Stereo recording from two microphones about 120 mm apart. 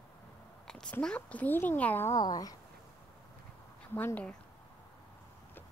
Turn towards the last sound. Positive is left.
turn(degrees=15)  # may be behind; listen again after turning